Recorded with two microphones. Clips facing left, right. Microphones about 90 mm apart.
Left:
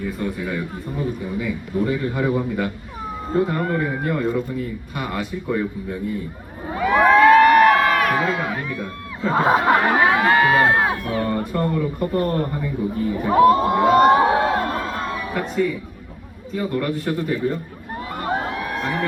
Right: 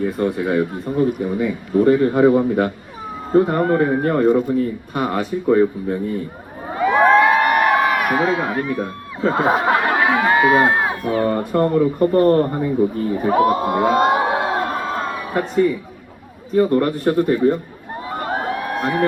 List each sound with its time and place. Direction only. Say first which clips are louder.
0.0 s a man's voice: right 6 dB; 30° right (ahead or behind)
6.8 s a sound: even; 15° right (ahead or behind); by 8.9 s 30° right (ahead or behind)
9.3 s speech: left 1 dB; centre (ahead or behind)
10.2 s crowd: right 2 dB; 10° right (ahead or behind)
11.1 s speech: right 4 dB; 30° right (ahead or behind)
13.3 s crowd: left 3 dB; 15° right (ahead or behind)
14.1 s a sound: left 2 dB; 10° right (ahead or behind)
15.3 s speech: right 6 dB; 35° right (ahead or behind)
18.5 s a sound: right 3 dB; 40° right (ahead or behind)